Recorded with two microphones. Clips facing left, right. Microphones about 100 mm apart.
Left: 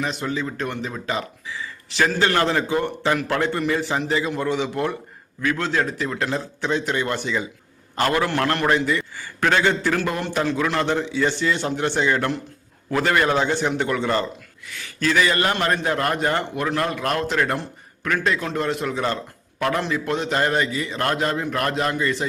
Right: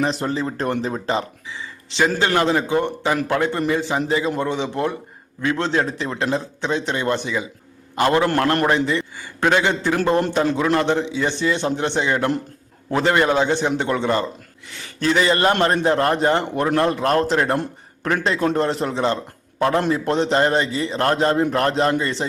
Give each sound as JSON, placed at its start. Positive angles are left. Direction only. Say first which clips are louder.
{"t": 0.0, "sound": "a man's voice", "louder": "right 4 dB", "side_deg": -35}